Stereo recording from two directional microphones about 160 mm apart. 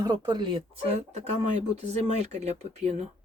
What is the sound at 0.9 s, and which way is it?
Speech, 45° right (ahead or behind).